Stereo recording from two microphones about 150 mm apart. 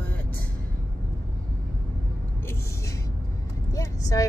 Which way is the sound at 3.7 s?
25° left (ahead or behind).